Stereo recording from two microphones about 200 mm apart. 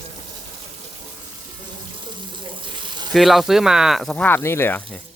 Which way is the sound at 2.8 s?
20° right (ahead or behind).